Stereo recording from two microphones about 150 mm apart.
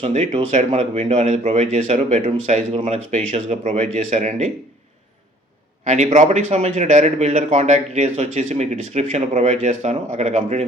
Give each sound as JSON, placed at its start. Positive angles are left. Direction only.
{"t": 0.0, "sound": "speech", "side_deg": -50}
{"t": 5.8, "sound": "speech", "side_deg": -50}